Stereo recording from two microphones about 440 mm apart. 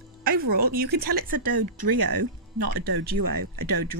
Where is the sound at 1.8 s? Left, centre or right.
Right.